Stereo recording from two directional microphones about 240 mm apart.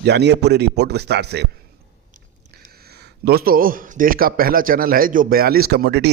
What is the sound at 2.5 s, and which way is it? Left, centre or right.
Speech, right.